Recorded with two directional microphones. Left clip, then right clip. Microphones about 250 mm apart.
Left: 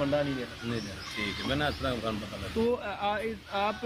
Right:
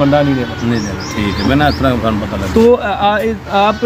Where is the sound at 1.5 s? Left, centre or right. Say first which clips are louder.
Right 19 dB; centre.